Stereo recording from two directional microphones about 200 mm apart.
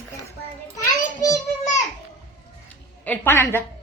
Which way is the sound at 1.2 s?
15° left (ahead or behind).